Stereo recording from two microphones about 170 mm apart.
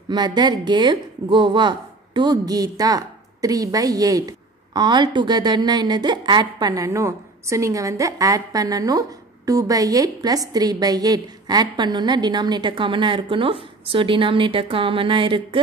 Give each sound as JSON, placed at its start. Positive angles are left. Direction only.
{"t": 0.1, "sound": "a woman's voice", "side_deg": -25}